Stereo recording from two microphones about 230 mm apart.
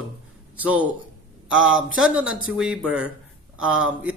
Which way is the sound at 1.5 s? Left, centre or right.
Right.